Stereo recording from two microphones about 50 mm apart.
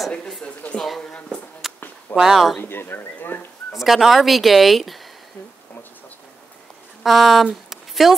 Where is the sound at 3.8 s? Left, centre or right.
Centre.